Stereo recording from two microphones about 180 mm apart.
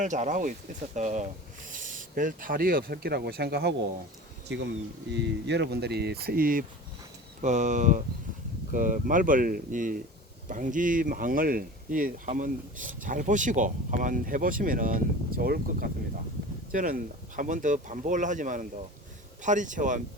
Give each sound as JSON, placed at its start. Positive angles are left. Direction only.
{"t": 0.0, "sound": "speech", "side_deg": -45}
{"t": 7.4, "sound": "speech", "side_deg": -40}